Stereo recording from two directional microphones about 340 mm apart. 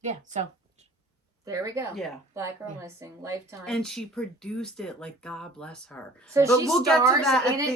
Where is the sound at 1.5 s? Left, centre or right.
Centre.